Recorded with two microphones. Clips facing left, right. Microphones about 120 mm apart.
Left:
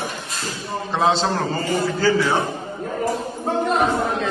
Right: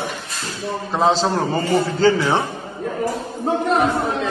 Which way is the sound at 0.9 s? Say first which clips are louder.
Right 2 dB; centre (ahead or behind).